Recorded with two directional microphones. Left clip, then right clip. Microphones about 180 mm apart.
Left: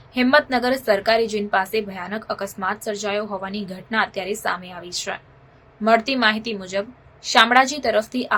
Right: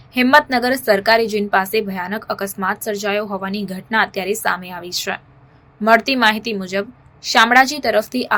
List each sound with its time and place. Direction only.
0.1 s a woman's voice: 20° right (ahead or behind)